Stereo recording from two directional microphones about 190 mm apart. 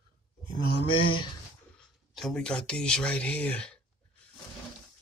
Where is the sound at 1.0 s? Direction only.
25° left (ahead or behind).